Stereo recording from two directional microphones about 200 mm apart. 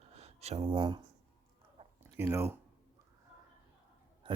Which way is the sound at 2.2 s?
15° right (ahead or behind).